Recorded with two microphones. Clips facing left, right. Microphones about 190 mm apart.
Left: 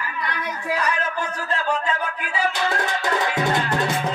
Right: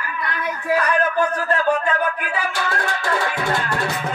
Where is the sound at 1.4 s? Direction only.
55° right (ahead or behind).